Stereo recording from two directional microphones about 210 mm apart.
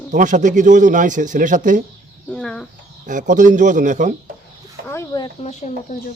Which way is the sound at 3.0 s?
40° right (ahead or behind).